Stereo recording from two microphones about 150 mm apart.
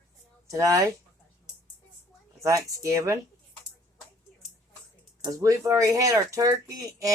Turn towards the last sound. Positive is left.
turn(degrees=-20)  # may be behind; listen again after turning